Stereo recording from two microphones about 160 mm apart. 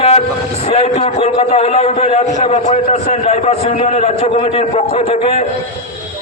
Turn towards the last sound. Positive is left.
turn(degrees=40)  # may be behind; listen again after turning